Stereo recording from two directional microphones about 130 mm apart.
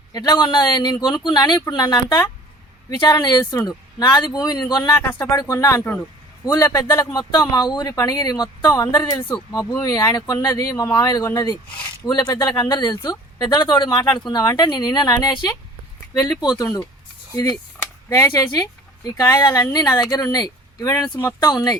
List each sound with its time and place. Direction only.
0.1 s speech: 30° left (ahead or behind)
5.8 s speech: 10° left (ahead or behind)
6.4 s speech: 25° left (ahead or behind)
20.9 s speech: 15° left (ahead or behind)
21.4 s speech: 30° left (ahead or behind)